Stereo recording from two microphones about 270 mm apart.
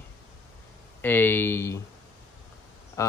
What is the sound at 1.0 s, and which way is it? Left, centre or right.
Speech, centre.